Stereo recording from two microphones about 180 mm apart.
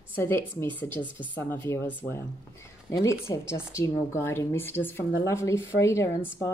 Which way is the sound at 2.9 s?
15° left (ahead or behind).